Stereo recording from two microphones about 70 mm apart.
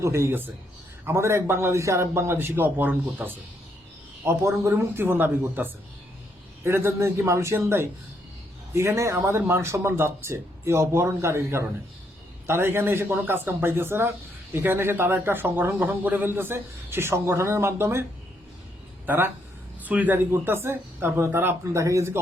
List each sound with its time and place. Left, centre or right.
0.0 s a man's voice: right
4.4 s a man's voice: right
4.9 s a man's voice: right
19.0 s speech: right
19.8 s speech: right
20.3 s a man's voice: right